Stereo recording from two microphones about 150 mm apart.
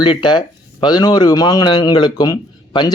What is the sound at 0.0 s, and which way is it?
Speech, 30° left (ahead or behind).